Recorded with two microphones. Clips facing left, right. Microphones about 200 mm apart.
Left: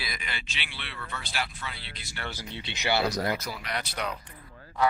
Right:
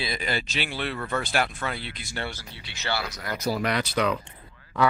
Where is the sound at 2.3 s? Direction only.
20° left (ahead or behind).